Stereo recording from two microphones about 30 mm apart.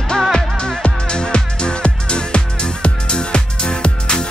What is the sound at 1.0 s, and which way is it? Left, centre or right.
Music, left.